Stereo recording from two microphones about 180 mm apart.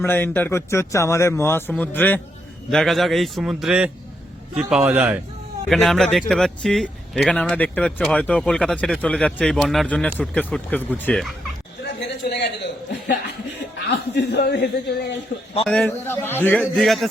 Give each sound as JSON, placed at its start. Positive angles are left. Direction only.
{"t": 0.0, "sound": "a man's voice", "side_deg": 10}
{"t": 11.9, "sound": "a sound", "side_deg": 70}
{"t": 13.9, "sound": "speech", "side_deg": 70}
{"t": 15.6, "sound": "speech", "side_deg": 5}